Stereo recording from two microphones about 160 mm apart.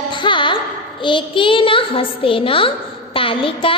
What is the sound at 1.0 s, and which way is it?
A child's voice, 30° left (ahead or behind).